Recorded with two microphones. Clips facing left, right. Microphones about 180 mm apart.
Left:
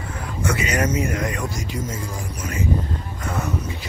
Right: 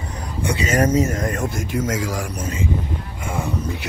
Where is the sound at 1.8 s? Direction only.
90° right.